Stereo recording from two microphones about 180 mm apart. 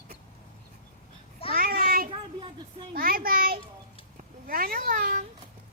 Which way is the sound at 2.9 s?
55° right (ahead or behind).